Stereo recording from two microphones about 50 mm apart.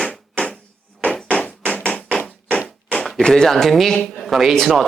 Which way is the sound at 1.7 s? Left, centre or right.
Left.